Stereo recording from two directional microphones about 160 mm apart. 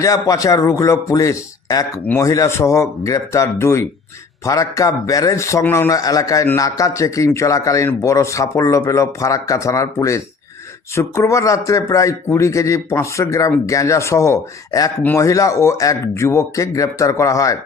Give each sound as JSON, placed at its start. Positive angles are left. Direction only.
{"t": 0.0, "sound": "a man's voice", "side_deg": 20}